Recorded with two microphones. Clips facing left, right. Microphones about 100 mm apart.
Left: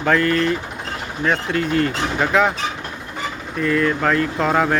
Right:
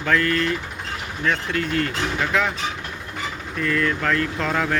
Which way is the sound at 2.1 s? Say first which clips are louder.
Left 6 dB; 40° left (ahead or behind).